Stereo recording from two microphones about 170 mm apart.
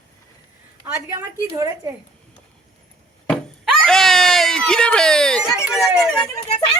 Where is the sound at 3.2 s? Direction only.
5° left (ahead or behind).